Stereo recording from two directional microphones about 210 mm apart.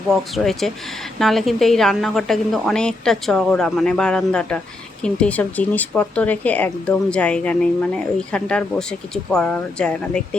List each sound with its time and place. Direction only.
0.1 s speech: centre (ahead or behind)